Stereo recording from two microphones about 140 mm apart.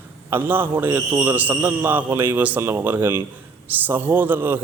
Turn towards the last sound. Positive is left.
turn(degrees=-15)  # may be behind; listen again after turning